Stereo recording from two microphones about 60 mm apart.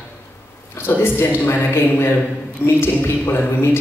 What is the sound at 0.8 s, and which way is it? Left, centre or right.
Speech, left.